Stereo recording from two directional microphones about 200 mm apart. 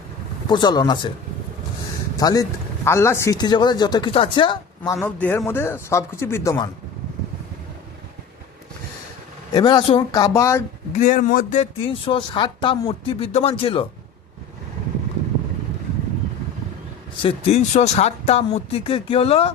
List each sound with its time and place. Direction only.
0.5 s speech: 20° left (ahead or behind)
2.1 s speech: 20° left (ahead or behind)
4.8 s a man's voice: 10° left (ahead or behind)
9.5 s speech: 20° left (ahead or behind)
10.9 s speech: 40° left (ahead or behind)
11.6 s speech: 25° left (ahead or behind)
17.2 s speech: 30° left (ahead or behind)